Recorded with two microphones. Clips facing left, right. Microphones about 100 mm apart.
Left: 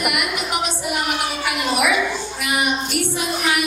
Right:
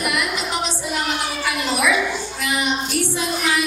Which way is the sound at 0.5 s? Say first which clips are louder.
Left 1 dB; 15° left (ahead or behind).